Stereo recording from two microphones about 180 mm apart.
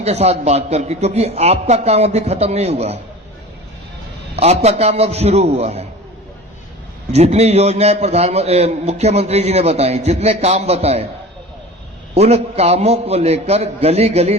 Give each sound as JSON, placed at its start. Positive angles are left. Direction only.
{"t": 0.0, "sound": "a man's voice", "side_deg": -35}
{"t": 4.4, "sound": "a man's voice", "side_deg": -35}
{"t": 7.1, "sound": "a man's voice", "side_deg": -35}
{"t": 12.1, "sound": "a man's voice", "side_deg": -35}